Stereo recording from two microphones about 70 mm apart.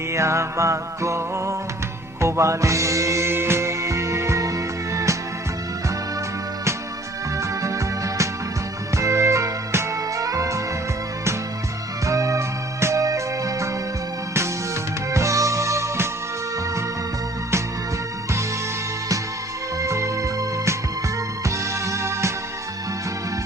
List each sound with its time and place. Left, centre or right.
0.1 s music: right
7.3 s music: right
12.0 s music: right
15.1 s music: right
19.8 s music: right